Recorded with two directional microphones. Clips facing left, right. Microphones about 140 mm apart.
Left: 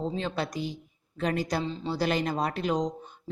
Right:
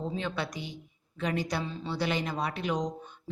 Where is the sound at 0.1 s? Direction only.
35° left (ahead or behind).